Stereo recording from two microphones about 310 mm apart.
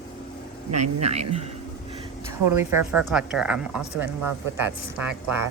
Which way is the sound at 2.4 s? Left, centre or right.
Centre.